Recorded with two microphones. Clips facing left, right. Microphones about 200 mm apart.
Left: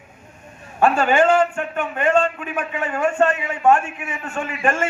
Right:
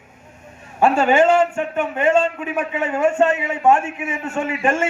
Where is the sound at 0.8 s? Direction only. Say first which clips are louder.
Right 2 dB; 25° right (ahead or behind).